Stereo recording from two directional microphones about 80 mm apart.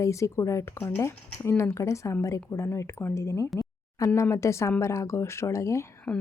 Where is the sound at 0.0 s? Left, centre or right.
Left.